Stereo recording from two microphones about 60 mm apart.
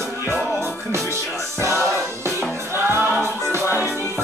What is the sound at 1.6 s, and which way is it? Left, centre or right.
Music, right.